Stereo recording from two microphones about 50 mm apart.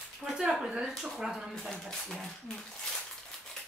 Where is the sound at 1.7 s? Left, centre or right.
Centre.